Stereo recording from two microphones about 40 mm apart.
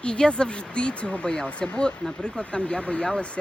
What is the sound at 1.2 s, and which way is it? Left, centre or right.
Speech, centre.